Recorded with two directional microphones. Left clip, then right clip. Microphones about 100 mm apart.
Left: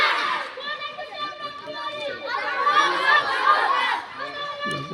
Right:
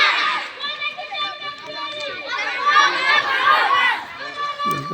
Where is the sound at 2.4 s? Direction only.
Centre (ahead or behind).